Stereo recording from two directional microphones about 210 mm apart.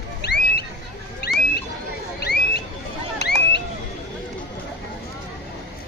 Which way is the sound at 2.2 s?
50° left (ahead or behind).